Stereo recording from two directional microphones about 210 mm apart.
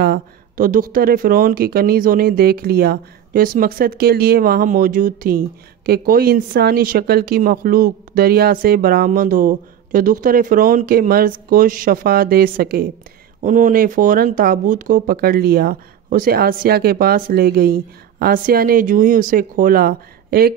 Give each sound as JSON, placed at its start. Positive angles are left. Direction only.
{"t": 0.0, "sound": "speech", "side_deg": -45}